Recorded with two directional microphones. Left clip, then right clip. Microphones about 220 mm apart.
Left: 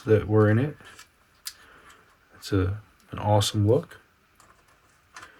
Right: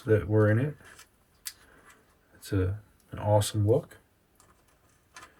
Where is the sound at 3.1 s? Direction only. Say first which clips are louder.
Left 2 dB; 15° left (ahead or behind).